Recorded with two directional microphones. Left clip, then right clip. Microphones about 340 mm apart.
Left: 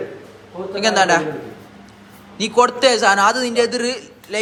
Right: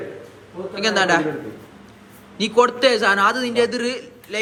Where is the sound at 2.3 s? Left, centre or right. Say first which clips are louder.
Left 1 dB; centre.